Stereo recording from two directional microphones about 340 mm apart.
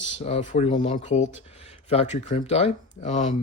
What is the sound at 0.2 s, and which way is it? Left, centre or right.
Speech, centre.